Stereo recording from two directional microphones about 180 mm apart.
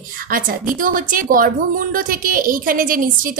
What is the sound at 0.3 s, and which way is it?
A woman's voice, 50° right (ahead or behind).